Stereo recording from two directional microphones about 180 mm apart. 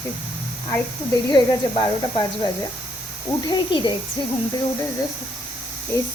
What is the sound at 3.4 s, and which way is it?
Speech, 25° left (ahead or behind).